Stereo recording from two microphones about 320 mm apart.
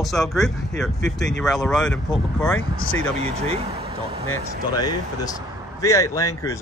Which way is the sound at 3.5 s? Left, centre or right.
Centre.